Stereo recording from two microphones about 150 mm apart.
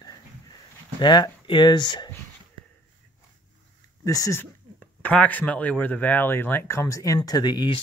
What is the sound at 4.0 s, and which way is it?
Speech, 20° left (ahead or behind).